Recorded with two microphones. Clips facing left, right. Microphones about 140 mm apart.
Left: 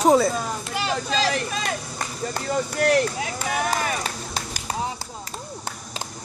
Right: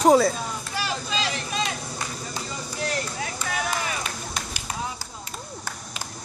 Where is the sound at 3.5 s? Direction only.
50° left (ahead or behind).